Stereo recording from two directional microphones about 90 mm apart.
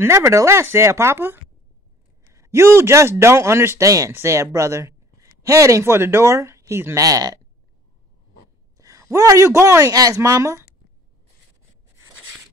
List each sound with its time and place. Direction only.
0.0 s a man's voice: 30° right (ahead or behind)
8.7 s a man's voice: 35° right (ahead or behind)